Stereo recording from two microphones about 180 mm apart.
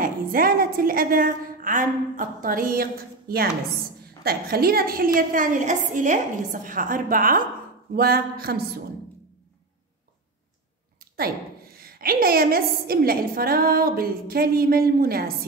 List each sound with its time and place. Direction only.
0.0 s a woman's voice: 55° right (ahead or behind)
11.1 s a woman's voice: 55° right (ahead or behind)